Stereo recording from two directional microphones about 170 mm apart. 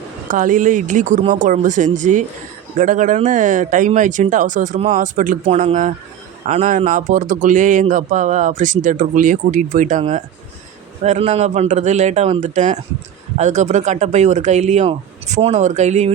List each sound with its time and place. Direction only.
0.3 s speech: 50° right (ahead or behind)